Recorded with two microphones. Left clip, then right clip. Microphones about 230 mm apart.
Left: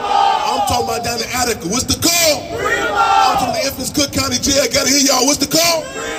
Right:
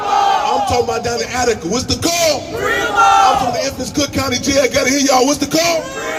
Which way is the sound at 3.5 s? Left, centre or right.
Left.